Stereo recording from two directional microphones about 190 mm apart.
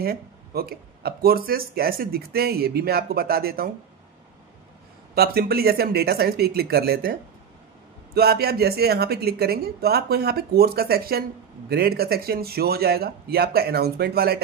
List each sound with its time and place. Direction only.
0.0 s speech: 55° right (ahead or behind)
5.1 s a woman's voice: 55° right (ahead or behind)